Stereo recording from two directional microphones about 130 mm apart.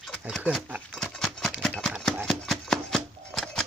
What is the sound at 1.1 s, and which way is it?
Horse, centre (ahead or behind).